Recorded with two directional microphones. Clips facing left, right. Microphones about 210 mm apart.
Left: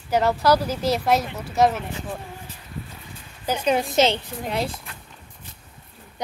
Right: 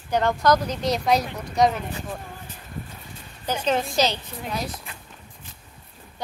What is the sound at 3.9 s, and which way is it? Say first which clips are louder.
Speech: left 4 dB; 25° left (ahead or behind).